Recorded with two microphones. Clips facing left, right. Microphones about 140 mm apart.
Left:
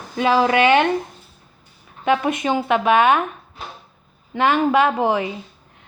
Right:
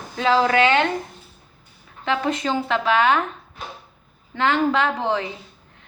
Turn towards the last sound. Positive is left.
turn(degrees=15)  # may be behind; listen again after turning